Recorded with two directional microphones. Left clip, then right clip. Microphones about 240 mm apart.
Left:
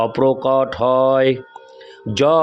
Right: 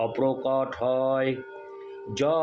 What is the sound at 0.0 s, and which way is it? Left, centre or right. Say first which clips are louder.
Mantra: left 9 dB; left.